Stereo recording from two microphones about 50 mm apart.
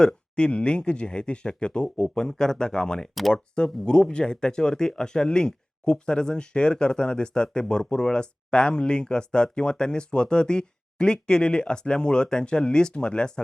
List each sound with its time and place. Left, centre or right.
0.0 s speech: left